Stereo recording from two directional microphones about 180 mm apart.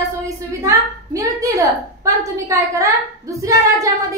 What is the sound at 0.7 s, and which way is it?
A woman's voice, 15° right (ahead or behind).